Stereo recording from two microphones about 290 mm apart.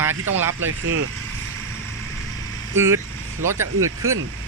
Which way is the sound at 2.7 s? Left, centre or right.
Centre.